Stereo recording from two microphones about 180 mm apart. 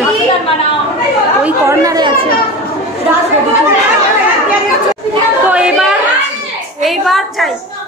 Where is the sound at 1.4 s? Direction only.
15° right (ahead or behind).